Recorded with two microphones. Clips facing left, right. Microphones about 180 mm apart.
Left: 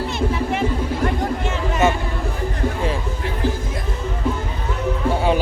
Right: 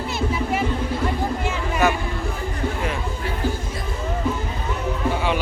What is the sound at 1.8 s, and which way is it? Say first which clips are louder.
Vehicle: left 2 dB; 25° left (ahead or behind).